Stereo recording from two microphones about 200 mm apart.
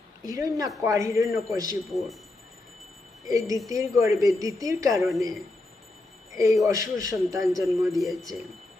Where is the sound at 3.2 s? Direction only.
15° right (ahead or behind).